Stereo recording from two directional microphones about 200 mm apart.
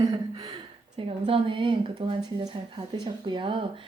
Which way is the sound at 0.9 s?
30° right (ahead or behind).